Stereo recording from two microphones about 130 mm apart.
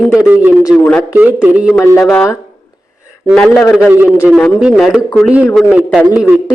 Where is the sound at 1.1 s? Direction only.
10° right (ahead or behind).